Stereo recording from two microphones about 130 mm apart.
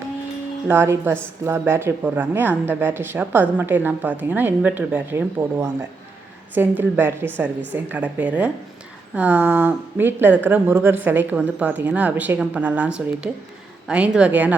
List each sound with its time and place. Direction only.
0.7 s speech: 15° right (ahead or behind)